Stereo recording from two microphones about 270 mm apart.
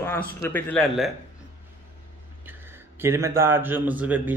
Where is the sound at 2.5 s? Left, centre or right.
Centre.